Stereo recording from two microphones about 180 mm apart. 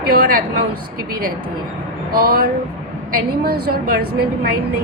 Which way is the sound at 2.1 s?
55° right (ahead or behind).